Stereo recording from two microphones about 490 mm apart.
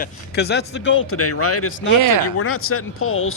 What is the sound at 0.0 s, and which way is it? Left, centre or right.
Speech, centre.